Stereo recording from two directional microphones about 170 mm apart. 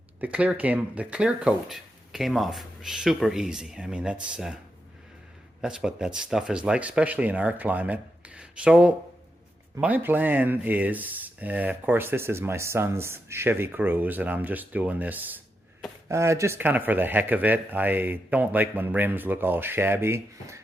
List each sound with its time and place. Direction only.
0.2 s speech: 10° right (ahead or behind)
5.6 s speech: 5° right (ahead or behind)